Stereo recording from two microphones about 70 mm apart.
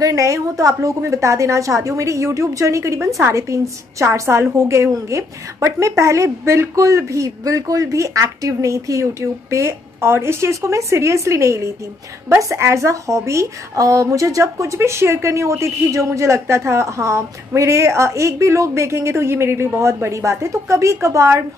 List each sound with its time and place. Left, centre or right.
0.0 s a woman's voice: right